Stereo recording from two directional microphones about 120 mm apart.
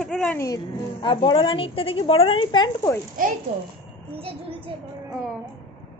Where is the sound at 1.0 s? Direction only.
45° left (ahead or behind).